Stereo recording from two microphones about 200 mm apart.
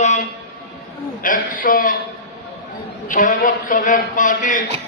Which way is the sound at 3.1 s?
40° left (ahead or behind).